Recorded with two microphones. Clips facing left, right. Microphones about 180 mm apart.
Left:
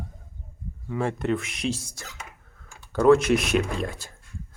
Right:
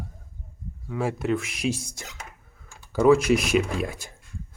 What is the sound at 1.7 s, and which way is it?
Speech, 15° right (ahead or behind).